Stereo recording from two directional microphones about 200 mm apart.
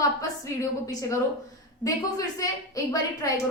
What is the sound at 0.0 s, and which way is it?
A woman's voice, 15° left (ahead or behind).